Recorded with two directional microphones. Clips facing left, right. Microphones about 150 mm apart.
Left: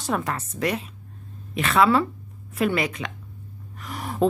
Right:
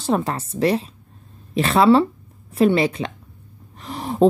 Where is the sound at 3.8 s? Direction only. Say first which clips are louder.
Right 6 dB; 30° right (ahead or behind).